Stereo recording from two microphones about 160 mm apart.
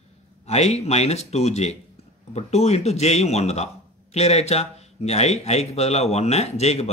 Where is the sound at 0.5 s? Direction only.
40° left (ahead or behind).